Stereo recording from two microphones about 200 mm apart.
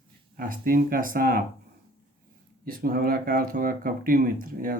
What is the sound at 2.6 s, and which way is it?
Speech, 45° right (ahead or behind).